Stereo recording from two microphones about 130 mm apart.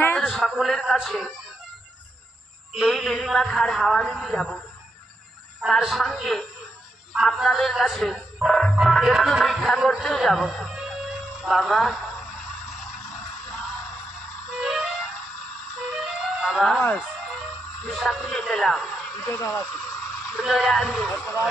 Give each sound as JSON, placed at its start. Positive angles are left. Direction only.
{"t": 0.0, "sound": "a sound", "side_deg": 15}
{"t": 0.3, "sound": "a man's voice", "side_deg": 0}
{"t": 2.7, "sound": "a man's voice", "side_deg": 0}
{"t": 5.6, "sound": "a man's voice", "side_deg": -5}
{"t": 12.7, "sound": "a sound", "side_deg": 0}
{"t": 14.5, "sound": "music", "side_deg": -5}
{"t": 15.9, "sound": "music", "side_deg": -5}
{"t": 17.8, "sound": "a man's voice", "side_deg": -5}
{"t": 19.2, "sound": "speech", "side_deg": 15}
{"t": 20.2, "sound": "a man's voice", "side_deg": -5}